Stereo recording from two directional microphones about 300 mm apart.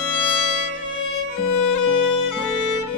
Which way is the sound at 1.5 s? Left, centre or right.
Left.